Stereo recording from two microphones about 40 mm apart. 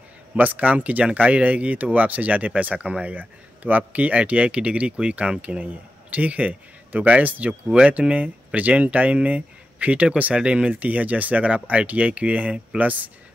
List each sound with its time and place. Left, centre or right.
0.4 s speech: right
8.0 s speech: right
10.7 s speech: right